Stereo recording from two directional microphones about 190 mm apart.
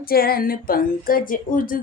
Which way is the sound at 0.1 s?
50° left (ahead or behind).